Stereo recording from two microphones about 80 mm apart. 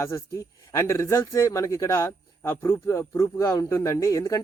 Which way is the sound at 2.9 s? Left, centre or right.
Left.